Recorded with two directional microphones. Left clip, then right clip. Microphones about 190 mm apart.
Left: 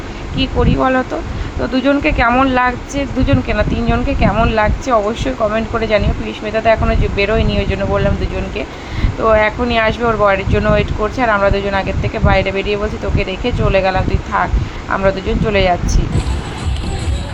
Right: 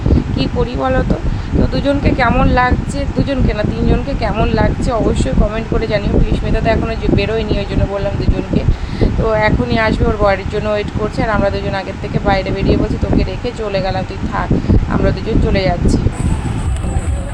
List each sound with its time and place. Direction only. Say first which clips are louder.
0.3 s speech: left 2 dB; 5° left (ahead or behind)
9.2 s speech: left 3 dB; 10° left (ahead or behind)